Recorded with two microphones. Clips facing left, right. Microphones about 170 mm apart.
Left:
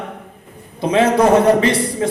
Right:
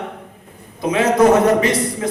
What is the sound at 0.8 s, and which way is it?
A man's voice, 30° left (ahead or behind).